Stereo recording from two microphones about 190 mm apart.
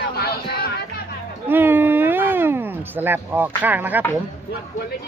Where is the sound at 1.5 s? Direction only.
10° right (ahead or behind).